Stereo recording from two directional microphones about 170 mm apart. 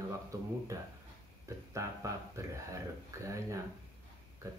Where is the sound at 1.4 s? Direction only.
15° right (ahead or behind).